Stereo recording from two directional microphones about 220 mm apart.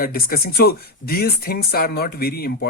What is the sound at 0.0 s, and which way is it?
Speech, 40° left (ahead or behind).